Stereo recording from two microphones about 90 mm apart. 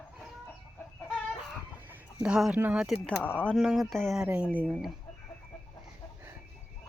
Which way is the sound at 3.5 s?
Centre (ahead or behind).